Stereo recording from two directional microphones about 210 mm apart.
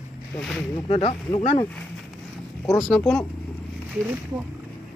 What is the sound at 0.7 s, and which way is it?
Speech, 30° left (ahead or behind).